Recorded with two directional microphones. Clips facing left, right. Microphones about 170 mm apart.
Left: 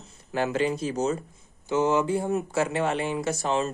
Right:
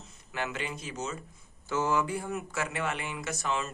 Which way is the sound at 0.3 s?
35° left (ahead or behind).